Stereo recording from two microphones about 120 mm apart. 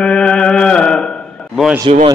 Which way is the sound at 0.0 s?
5° left (ahead or behind).